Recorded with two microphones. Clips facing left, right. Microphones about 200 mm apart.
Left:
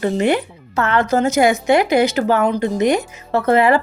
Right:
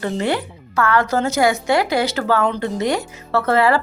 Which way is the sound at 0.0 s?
15° left (ahead or behind).